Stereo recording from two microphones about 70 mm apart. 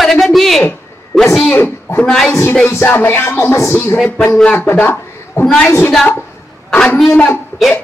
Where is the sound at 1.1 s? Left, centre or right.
Centre.